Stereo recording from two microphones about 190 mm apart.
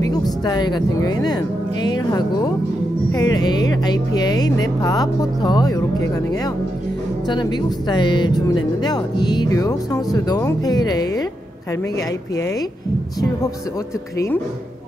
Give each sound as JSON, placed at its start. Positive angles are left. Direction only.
{"t": 0.0, "sound": "speech", "side_deg": 20}
{"t": 14.1, "sound": "speech", "side_deg": 15}